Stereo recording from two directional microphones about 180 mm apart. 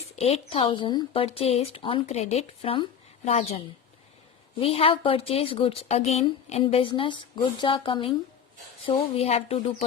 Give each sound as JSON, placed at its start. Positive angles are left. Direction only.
{"t": 0.2, "sound": "a woman's voice", "side_deg": 35}
{"t": 4.6, "sound": "a woman's voice", "side_deg": 35}